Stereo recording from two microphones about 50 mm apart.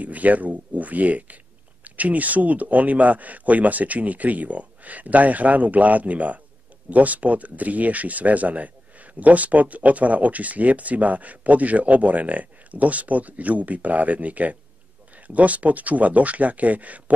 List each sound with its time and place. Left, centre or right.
0.0 s speech: right